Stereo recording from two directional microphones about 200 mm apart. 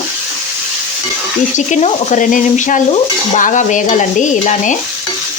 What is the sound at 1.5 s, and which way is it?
Frying, 35° left (ahead or behind).